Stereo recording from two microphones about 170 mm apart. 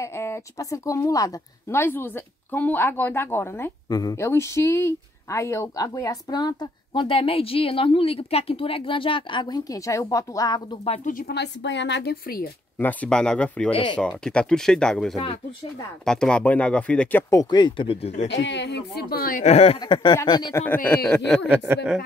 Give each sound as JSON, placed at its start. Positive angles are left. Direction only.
{"t": 0.0, "sound": "speech", "side_deg": 15}
{"t": 10.8, "sound": "speech", "side_deg": 35}
{"t": 11.1, "sound": "speech", "side_deg": 75}
{"t": 12.7, "sound": "speech", "side_deg": 10}
{"t": 17.3, "sound": "speech", "side_deg": 20}
{"t": 18.3, "sound": "speech", "side_deg": 90}
{"t": 19.4, "sound": "speech", "side_deg": 35}
{"t": 19.8, "sound": "speech", "side_deg": 25}
{"t": 20.5, "sound": "speech", "side_deg": 10}